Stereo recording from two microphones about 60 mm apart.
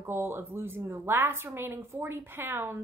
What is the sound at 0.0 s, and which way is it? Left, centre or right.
A woman's voice, right.